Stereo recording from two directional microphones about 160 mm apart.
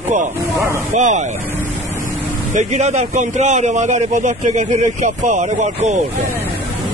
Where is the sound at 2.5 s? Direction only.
45° right (ahead or behind).